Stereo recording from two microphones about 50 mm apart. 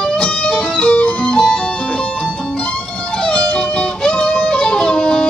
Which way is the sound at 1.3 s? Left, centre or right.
Centre.